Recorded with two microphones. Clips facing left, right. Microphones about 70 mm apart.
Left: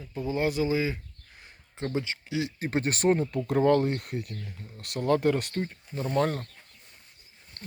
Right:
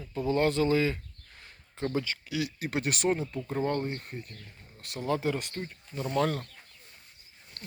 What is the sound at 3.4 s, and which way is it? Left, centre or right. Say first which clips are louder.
Speech: left 11 dB; left.